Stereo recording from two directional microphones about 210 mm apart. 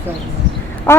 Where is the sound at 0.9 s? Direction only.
10° left (ahead or behind).